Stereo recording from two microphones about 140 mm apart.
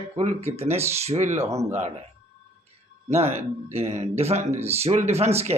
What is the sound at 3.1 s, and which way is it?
Speech, 50° right (ahead or behind).